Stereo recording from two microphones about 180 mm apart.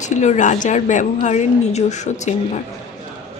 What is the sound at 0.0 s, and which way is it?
A woman's voice, 40° left (ahead or behind).